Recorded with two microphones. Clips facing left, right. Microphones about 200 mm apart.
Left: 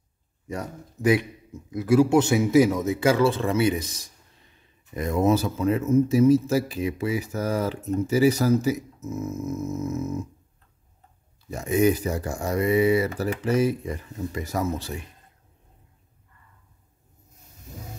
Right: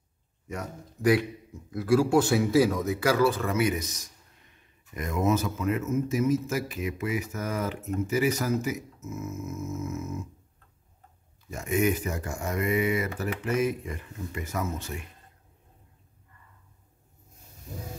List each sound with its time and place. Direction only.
0.5 s speech: 30° left (ahead or behind)
1.1 s speech: 20° left (ahead or behind); by 10.2 s 35° left (ahead or behind)
11.5 s speech: 35° left (ahead or behind)